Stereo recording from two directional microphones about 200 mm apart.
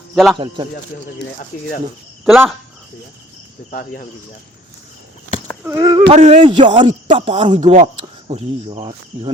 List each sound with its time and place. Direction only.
0.3 s speech: 25° right (ahead or behind)
2.2 s speech: centre (ahead or behind)
3.7 s speech: 45° left (ahead or behind)
5.6 s speech: 15° right (ahead or behind)
6.1 s a man's voice: 30° right (ahead or behind)
7.6 s a man's voice: 35° right (ahead or behind)